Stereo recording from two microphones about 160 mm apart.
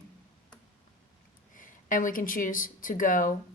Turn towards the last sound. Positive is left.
turn(degrees=55)  # may be behind; listen again after turning